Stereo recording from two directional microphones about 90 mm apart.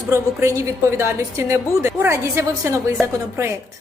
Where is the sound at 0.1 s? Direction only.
30° right (ahead or behind).